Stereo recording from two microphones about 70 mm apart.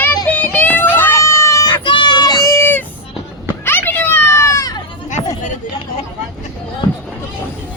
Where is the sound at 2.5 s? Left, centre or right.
Left.